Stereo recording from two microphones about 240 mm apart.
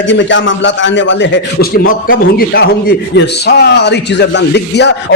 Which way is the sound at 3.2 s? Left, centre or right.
Left.